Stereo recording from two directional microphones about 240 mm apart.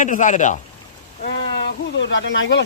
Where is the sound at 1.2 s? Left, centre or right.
Left.